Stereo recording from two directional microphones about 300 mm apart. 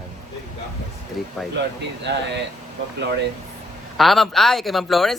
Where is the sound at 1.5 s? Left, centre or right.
Right.